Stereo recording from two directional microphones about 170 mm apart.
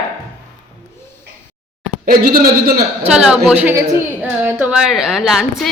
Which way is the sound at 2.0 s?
60° right (ahead or behind).